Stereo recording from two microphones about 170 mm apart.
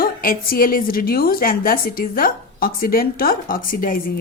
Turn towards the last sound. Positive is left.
turn(degrees=55)  # may be behind; listen again after turning